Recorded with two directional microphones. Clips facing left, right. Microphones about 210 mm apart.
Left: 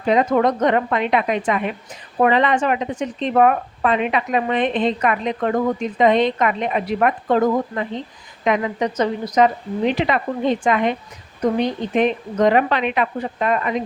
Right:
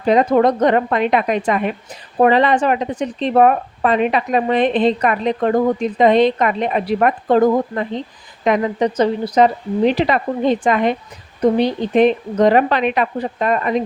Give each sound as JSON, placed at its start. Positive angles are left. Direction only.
{"t": 0.0, "sound": "speech", "side_deg": -35}